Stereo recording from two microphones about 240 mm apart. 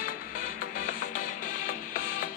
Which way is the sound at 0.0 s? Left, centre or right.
Left.